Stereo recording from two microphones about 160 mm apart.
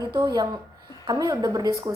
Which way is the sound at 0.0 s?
25° right (ahead or behind).